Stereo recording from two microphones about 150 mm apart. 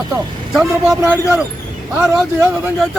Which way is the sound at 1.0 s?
20° right (ahead or behind).